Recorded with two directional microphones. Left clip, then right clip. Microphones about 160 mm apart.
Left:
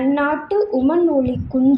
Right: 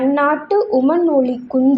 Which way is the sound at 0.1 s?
20° right (ahead or behind).